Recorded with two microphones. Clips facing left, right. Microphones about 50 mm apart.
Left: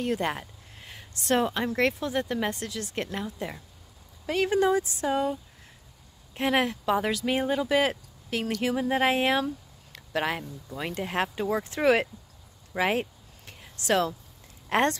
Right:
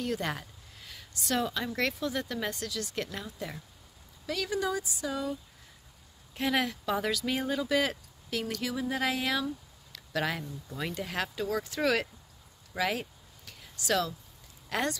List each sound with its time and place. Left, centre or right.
0.0 s speech: left
11.0 s speech: left
12.7 s a sound: left
14.7 s speech: left